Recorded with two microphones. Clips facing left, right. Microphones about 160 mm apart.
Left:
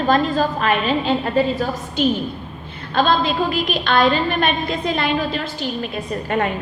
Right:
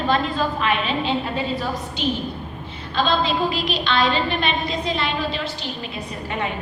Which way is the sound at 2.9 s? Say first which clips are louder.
Left 3 dB; 50° left (ahead or behind).